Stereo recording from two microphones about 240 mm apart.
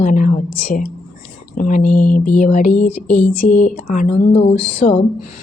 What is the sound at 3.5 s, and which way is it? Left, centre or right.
A woman's voice, left.